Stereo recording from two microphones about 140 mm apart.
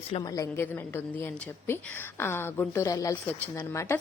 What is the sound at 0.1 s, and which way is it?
A woman's voice, 30° left (ahead or behind).